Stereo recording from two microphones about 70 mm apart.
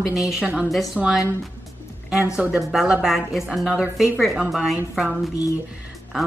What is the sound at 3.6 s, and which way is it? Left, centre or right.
Speech, centre.